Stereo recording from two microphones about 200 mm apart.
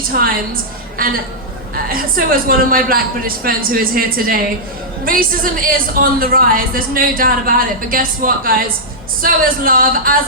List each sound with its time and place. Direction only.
0.1 s a woman's voice: 45° right (ahead or behind)